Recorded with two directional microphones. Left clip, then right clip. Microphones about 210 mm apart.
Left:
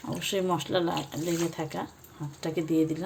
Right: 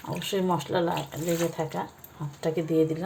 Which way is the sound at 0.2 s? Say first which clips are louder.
Right 1 dB; 55° left (ahead or behind).